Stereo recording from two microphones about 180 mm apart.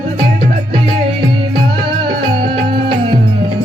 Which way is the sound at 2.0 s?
30° right (ahead or behind).